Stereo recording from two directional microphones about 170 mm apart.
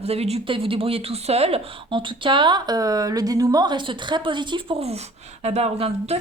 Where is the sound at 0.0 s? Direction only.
35° right (ahead or behind).